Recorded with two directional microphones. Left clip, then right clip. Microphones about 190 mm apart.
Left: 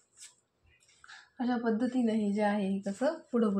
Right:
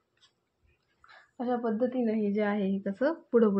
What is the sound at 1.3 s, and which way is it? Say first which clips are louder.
Speech: right 2 dB; 40° right (ahead or behind).